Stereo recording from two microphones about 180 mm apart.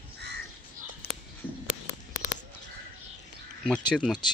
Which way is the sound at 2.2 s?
20° left (ahead or behind).